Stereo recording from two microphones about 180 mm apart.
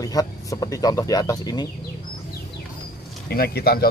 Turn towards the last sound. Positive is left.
turn(degrees=60)  # may be behind; listen again after turning